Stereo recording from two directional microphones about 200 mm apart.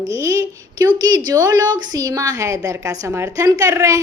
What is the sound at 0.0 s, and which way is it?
A woman's voice, 15° right (ahead or behind).